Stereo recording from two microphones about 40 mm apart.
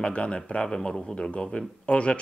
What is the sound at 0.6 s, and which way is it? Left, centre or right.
Speech, centre.